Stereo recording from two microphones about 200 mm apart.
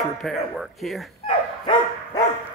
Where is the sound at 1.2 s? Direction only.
25° left (ahead or behind).